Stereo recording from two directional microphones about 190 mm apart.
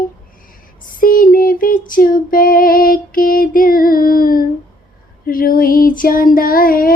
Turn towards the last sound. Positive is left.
turn(degrees=50)  # may be behind; listen again after turning